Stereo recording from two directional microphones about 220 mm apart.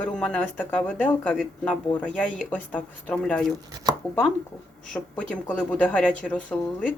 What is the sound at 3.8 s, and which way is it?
Chopping, 15° right (ahead or behind).